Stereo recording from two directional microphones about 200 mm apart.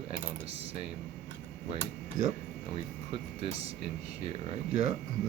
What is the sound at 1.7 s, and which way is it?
Speech, 40° right (ahead or behind).